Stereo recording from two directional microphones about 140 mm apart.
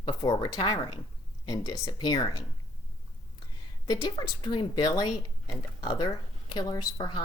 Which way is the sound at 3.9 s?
30° left (ahead or behind).